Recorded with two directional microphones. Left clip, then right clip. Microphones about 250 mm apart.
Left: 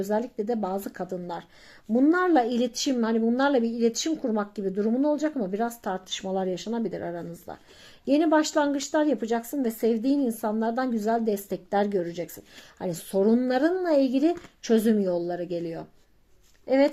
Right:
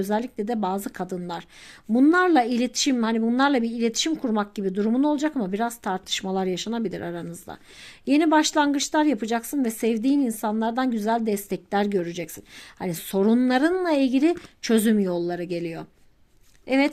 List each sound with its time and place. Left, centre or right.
0.0 s speech: right
16.6 s speech: right